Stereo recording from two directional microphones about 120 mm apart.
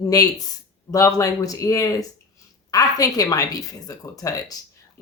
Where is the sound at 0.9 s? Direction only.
25° left (ahead or behind).